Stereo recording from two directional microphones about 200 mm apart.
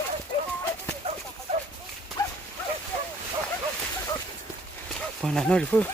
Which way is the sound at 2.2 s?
15° left (ahead or behind).